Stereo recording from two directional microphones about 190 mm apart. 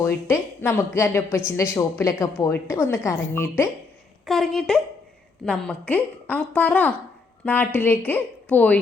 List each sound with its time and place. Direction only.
0.0 s a woman's voice: 15° left (ahead or behind)
4.3 s a woman's voice: centre (ahead or behind)